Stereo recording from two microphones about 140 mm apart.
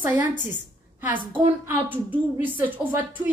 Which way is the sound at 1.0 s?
15° right (ahead or behind).